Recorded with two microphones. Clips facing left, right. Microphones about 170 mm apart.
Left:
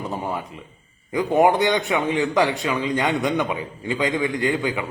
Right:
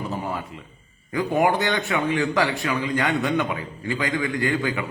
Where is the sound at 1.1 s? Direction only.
20° left (ahead or behind).